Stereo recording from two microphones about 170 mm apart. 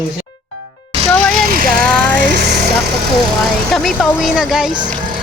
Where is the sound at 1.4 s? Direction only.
55° right (ahead or behind).